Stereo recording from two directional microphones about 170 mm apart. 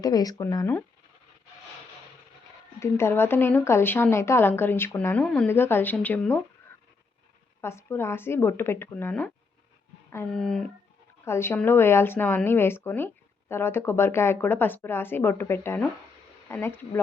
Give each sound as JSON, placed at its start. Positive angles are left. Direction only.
{"t": 0.0, "sound": "speech", "side_deg": 20}
{"t": 2.8, "sound": "a woman's voice", "side_deg": 15}
{"t": 7.6, "sound": "a woman's voice", "side_deg": 15}
{"t": 10.3, "sound": "speech", "side_deg": 5}
{"t": 11.3, "sound": "a woman's voice", "side_deg": 15}